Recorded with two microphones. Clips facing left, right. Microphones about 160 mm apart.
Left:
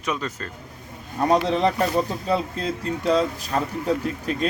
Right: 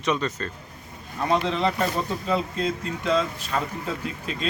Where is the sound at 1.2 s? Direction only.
40° left (ahead or behind).